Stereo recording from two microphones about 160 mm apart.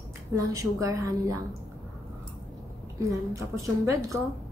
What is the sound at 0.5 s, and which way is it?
Speech, 20° right (ahead or behind).